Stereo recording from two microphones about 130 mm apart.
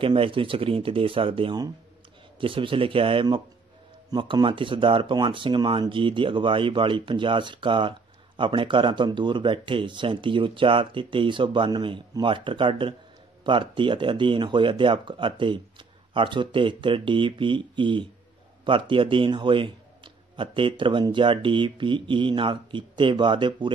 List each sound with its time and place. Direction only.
0.0 s speech: 40° right (ahead or behind)